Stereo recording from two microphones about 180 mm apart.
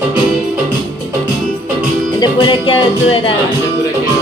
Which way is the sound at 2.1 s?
25° left (ahead or behind).